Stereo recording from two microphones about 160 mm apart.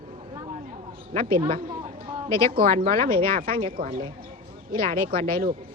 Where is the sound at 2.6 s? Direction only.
65° right (ahead or behind).